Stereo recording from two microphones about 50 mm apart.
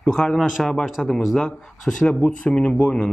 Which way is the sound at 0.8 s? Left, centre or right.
Centre.